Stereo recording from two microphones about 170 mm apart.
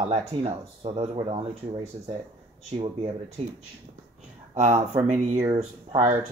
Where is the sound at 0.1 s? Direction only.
35° right (ahead or behind).